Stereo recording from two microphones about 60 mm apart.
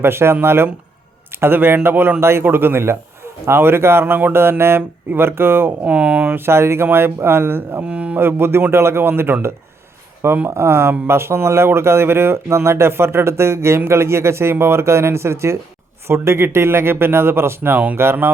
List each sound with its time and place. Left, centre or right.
0.0 s speech: right
5.8 s speech: centre
6.3 s speech: right
7.9 s speech: right
8.2 s speech: right
10.5 s speech: right